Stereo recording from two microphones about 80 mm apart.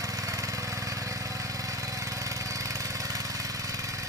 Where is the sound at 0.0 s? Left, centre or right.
Right.